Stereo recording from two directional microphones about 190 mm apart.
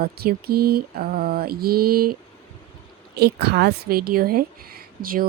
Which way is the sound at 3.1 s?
60° right (ahead or behind).